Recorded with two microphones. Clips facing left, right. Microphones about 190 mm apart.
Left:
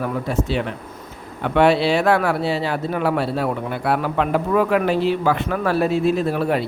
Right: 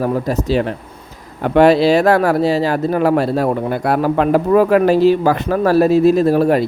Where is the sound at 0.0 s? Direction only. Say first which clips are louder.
Right 5 dB; 40° right (ahead or behind).